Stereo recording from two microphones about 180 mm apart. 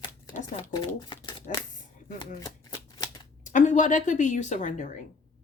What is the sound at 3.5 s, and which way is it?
A woman's voice, 45° left (ahead or behind).